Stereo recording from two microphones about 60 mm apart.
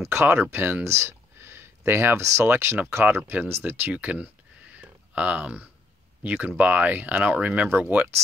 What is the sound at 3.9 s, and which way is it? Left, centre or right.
Speech, right.